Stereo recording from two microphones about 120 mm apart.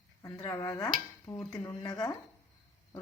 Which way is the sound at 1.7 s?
30° left (ahead or behind).